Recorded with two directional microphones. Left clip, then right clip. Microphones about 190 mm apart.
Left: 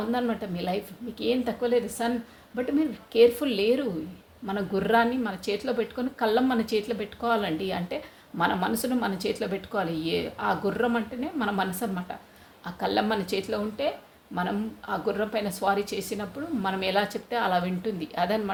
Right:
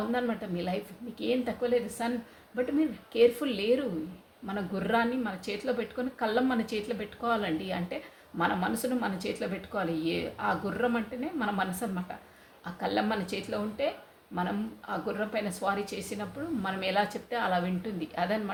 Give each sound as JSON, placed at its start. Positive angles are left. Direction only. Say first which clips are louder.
{"t": 0.1, "sound": "speech", "louder": "left 3 dB", "side_deg": 40}